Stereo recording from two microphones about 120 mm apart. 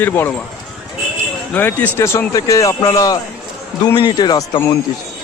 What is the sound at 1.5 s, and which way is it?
Speech, 15° left (ahead or behind).